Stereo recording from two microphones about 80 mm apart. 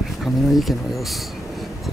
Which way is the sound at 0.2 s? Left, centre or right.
Centre.